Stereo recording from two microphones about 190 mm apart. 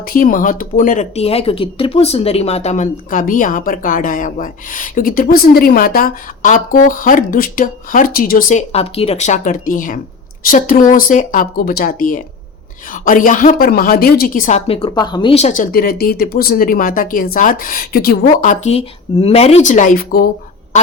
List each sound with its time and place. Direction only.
0.0 s speech: 50° left (ahead or behind)
14.7 s speech: 25° left (ahead or behind); by 20.2 s 50° left (ahead or behind)